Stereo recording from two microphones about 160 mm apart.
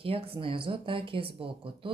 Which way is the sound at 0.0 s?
35° right (ahead or behind).